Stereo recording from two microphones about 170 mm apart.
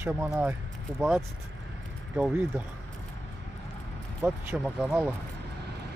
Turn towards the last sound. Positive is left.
turn(degrees=-5)  # may be behind; listen again after turning